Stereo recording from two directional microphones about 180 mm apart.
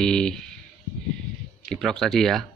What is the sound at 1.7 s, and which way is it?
Speech, centre (ahead or behind).